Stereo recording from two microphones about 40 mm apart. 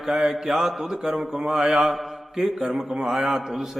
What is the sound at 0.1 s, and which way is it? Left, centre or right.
Speech, centre.